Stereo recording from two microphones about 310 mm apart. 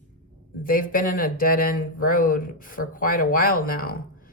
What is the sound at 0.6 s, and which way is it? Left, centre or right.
Speech, left.